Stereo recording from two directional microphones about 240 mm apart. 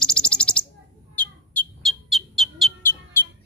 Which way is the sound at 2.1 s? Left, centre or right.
Centre.